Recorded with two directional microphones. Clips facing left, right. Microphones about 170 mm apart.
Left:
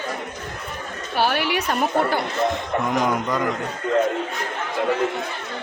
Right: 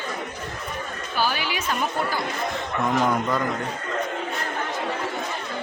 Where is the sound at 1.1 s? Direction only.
65° left (ahead or behind).